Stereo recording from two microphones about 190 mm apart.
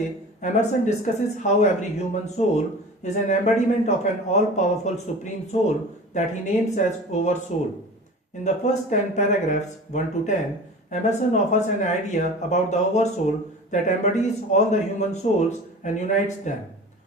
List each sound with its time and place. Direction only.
0.4 s speech: 40° left (ahead or behind)
8.4 s speech: 40° left (ahead or behind)